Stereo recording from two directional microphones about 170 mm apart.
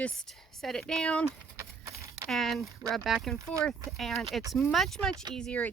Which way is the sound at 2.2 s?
Centre (ahead or behind).